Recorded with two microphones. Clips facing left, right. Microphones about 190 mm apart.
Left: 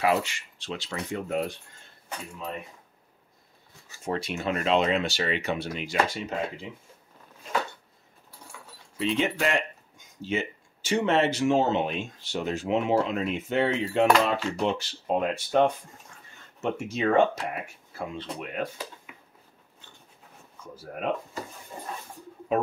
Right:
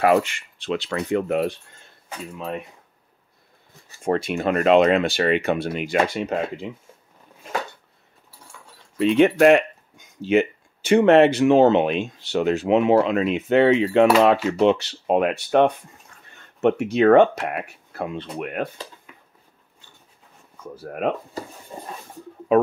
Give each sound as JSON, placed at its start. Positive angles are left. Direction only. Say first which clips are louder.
{"t": 0.0, "sound": "speech", "louder": "right 7 dB", "side_deg": -55}
{"t": 4.0, "sound": "speech", "louder": "right 8 dB", "side_deg": -50}
{"t": 8.9, "sound": "speech", "louder": "right 10 dB", "side_deg": -55}
{"t": 20.7, "sound": "speech", "louder": "right 7 dB", "side_deg": -60}
{"t": 21.7, "sound": "dog", "louder": "right 4 dB", "side_deg": -25}
{"t": 22.5, "sound": "speech", "louder": "right 9 dB", "side_deg": -70}